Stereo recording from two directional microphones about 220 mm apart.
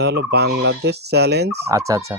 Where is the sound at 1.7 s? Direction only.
15° right (ahead or behind).